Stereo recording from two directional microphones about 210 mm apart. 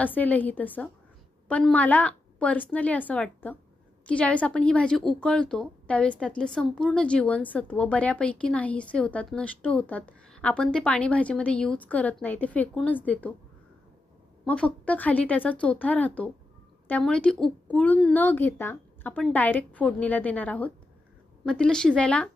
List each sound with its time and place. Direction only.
0.0 s a woman's voice: 10° left (ahead or behind)
14.4 s a woman's voice: 5° left (ahead or behind)